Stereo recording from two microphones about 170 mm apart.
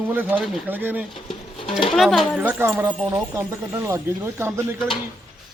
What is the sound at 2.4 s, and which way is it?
Speech, 10° right (ahead or behind).